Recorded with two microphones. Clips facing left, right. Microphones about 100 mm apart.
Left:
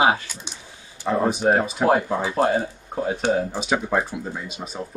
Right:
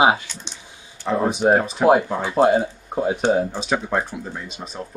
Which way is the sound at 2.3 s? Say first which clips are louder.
Right 6 dB; 20° right (ahead or behind).